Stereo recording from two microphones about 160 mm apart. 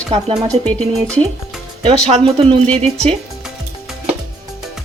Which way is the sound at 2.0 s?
40° right (ahead or behind).